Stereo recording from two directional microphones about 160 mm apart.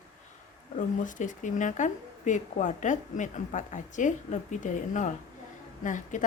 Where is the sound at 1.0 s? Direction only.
55° left (ahead or behind).